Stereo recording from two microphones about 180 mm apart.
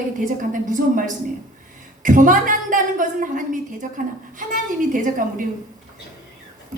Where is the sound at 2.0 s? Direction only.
45° right (ahead or behind).